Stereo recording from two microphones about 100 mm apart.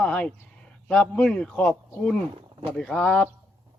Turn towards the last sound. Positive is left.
turn(degrees=10)  # may be behind; listen again after turning